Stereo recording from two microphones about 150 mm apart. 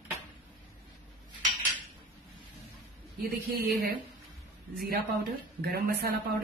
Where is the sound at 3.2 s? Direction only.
90° right.